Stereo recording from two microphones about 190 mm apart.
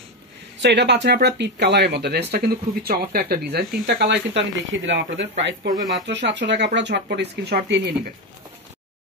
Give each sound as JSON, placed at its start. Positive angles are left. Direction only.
{"t": 0.6, "sound": "speech", "side_deg": -65}